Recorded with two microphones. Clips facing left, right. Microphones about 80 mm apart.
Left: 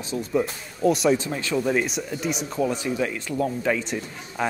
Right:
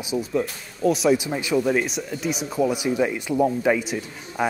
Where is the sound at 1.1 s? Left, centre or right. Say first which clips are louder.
Right 3 dB; centre.